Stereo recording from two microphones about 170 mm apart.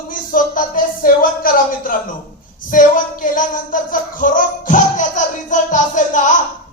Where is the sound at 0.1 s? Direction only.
55° left (ahead or behind).